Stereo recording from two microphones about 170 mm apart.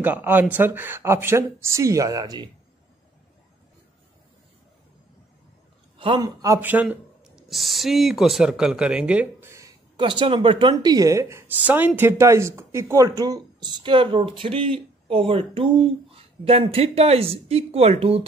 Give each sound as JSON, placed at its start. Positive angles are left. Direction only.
{"t": 0.0, "sound": "speech", "side_deg": -10}
{"t": 5.9, "sound": "speech", "side_deg": -30}